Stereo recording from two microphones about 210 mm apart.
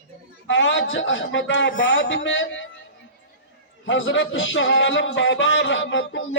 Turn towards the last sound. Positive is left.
turn(degrees=60)  # may be behind; listen again after turning